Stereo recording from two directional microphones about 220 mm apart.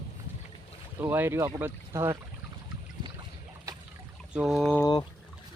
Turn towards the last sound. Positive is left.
turn(degrees=15)  # may be behind; listen again after turning